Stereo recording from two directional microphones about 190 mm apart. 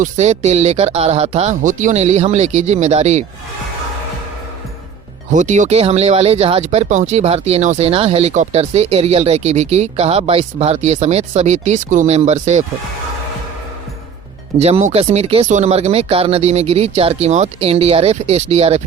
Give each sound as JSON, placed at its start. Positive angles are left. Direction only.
{"t": 0.0, "sound": "speech", "side_deg": -35}
{"t": 5.3, "sound": "speech", "side_deg": -40}
{"t": 14.6, "sound": "speech", "side_deg": -35}